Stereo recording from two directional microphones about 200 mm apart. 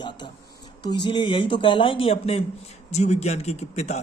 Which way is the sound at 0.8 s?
20° left (ahead or behind).